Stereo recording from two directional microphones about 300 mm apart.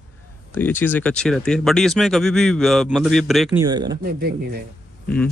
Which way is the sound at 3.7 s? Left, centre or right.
Centre.